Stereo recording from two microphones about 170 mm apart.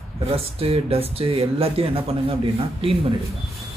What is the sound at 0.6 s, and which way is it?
Speech, 35° right (ahead or behind).